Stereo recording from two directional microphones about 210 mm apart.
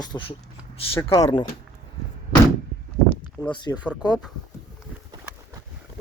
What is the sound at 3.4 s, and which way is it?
Speech, 20° left (ahead or behind).